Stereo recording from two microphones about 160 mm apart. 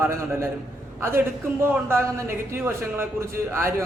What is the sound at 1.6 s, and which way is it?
Speech, 15° right (ahead or behind).